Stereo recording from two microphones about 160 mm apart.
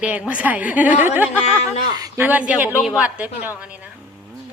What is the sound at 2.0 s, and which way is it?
Speech, 25° right (ahead or behind).